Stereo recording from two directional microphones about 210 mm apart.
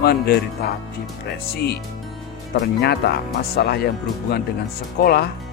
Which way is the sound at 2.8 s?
50° left (ahead or behind).